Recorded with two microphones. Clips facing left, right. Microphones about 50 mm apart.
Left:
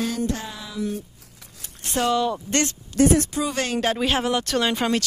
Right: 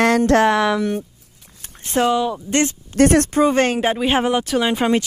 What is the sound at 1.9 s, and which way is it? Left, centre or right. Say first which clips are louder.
Speech: right 4 dB; right.